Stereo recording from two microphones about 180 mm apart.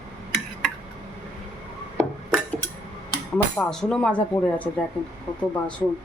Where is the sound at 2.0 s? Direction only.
5° left (ahead or behind).